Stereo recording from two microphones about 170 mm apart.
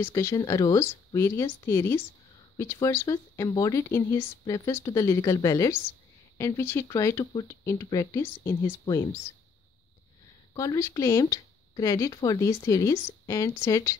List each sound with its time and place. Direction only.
0.0 s speech: 15° left (ahead or behind)
10.5 s speech: 20° left (ahead or behind)